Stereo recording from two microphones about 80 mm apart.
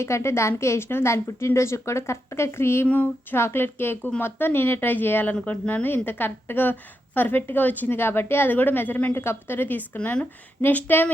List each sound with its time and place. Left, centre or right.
0.0 s a woman's voice: left
2.8 s a woman's voice: left